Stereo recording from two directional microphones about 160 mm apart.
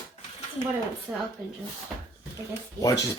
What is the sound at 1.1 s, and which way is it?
Speech, 20° right (ahead or behind).